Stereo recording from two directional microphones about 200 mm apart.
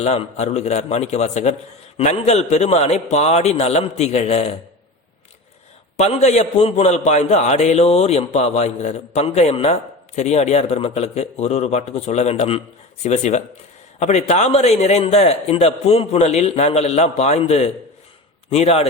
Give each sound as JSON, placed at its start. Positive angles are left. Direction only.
{"t": 0.0, "sound": "a man's voice", "side_deg": 35}
{"t": 6.0, "sound": "a man's voice", "side_deg": 35}